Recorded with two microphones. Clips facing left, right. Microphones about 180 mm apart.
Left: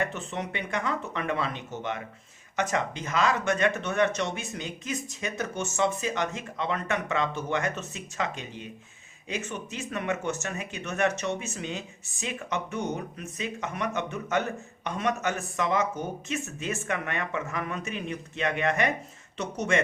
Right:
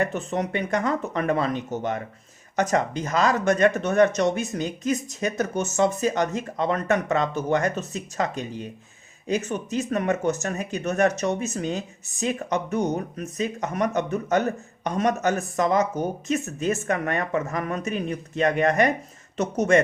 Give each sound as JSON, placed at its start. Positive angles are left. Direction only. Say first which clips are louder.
{"t": 0.0, "sound": "speech", "louder": "right 6 dB", "side_deg": -40}